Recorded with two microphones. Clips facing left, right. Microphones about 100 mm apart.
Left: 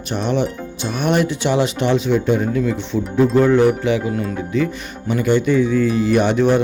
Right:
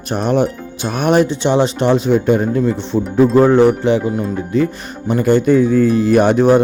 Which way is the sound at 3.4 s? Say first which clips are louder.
Right 3 dB; 35° right (ahead or behind).